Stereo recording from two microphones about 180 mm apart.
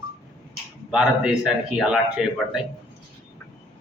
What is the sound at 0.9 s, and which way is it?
A man's voice, 5° right (ahead or behind).